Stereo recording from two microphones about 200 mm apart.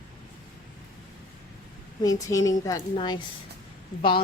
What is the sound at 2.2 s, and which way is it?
A woman's voice, 15° left (ahead or behind).